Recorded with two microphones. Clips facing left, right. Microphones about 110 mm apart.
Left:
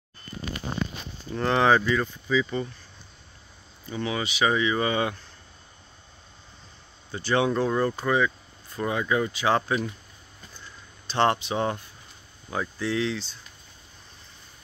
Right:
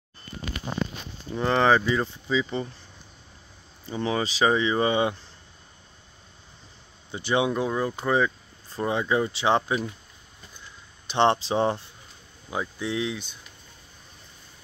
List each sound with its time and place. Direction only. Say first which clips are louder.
1.3 s speech: even; centre (ahead or behind)
1.9 s speech: even; 20° right (ahead or behind)
3.8 s speech: right 3 dB; 30° right (ahead or behind)
7.1 s speech: even; 20° right (ahead or behind)
8.1 s speech: right 1 dB; 30° right (ahead or behind)
11.1 s speech: right 2 dB; 20° right (ahead or behind)
12.4 s speech: left 1 dB; 15° right (ahead or behind)